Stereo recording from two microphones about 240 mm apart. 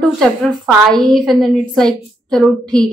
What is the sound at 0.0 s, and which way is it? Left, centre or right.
Speech, centre.